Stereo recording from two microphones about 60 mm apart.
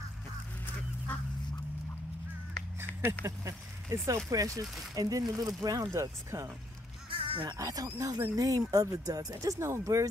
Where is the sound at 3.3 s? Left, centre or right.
Right.